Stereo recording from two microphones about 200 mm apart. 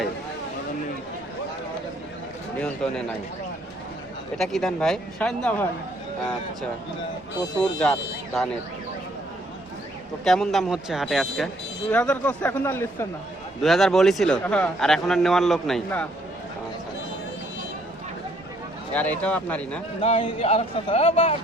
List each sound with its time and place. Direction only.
2.6 s speech: 5° left (ahead or behind)
4.4 s a man's voice: centre (ahead or behind)
7.6 s a man's voice: 5° left (ahead or behind)
10.2 s a man's voice: centre (ahead or behind)
13.6 s a man's voice: centre (ahead or behind)
18.9 s speech: 5° left (ahead or behind)
20.0 s speech: 30° left (ahead or behind)